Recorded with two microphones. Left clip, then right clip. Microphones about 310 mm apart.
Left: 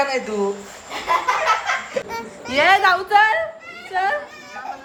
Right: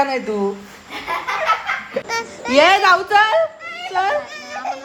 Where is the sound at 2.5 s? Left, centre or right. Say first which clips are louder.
Right 3 dB; centre.